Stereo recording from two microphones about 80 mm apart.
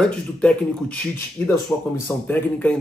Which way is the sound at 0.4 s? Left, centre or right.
Centre.